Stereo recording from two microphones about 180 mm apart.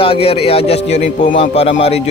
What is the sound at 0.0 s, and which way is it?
A man's voice, 30° left (ahead or behind).